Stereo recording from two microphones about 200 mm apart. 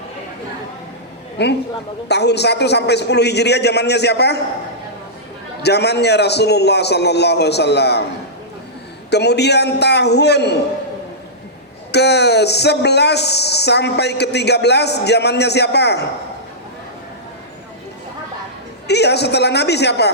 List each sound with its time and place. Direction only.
1.4 s speech: 55° left (ahead or behind)
5.6 s speech: 55° left (ahead or behind)
9.0 s speech: 55° left (ahead or behind)
11.9 s speech: 55° left (ahead or behind)
18.9 s speech: 55° left (ahead or behind)